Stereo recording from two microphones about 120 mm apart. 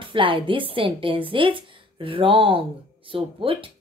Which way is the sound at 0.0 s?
45° right (ahead or behind).